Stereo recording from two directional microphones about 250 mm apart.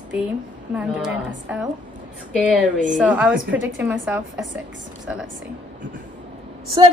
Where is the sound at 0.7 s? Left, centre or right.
Centre.